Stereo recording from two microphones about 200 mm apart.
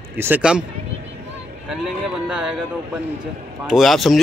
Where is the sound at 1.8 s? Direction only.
5° right (ahead or behind).